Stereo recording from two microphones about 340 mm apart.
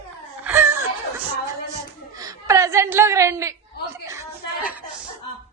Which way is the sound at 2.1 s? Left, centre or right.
Centre.